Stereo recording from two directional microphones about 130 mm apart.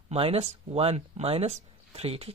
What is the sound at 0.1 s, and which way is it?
Speech, 50° right (ahead or behind).